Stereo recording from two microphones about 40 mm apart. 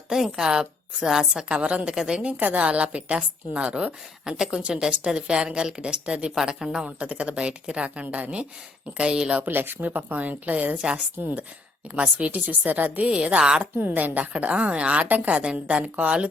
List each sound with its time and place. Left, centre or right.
0.1 s a woman's voice: centre
1.5 s a woman's voice: right
2.0 s a woman's voice: centre
2.2 s a woman's voice: right
6.3 s a woman's voice: centre
6.8 s a woman's voice: right
9.4 s a woman's voice: right
11.9 s a woman's voice: right
13.1 s speech: right
13.7 s a woman's voice: right
15.0 s a woman's voice: right
15.4 s a woman's voice: right